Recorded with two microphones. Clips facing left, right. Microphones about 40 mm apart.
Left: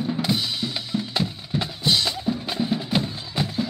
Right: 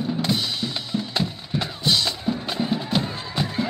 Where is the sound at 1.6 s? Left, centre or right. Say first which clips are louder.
Even; left.